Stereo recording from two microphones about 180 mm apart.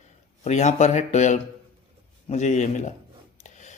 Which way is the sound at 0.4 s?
40° left (ahead or behind).